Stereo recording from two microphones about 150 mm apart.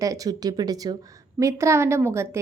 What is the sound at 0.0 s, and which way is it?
Speech, 25° right (ahead or behind).